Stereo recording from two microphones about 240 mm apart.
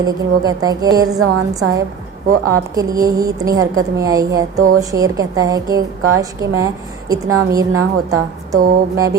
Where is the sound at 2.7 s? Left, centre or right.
Centre.